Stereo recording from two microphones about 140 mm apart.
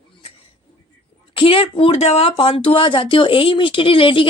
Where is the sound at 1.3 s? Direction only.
40° left (ahead or behind).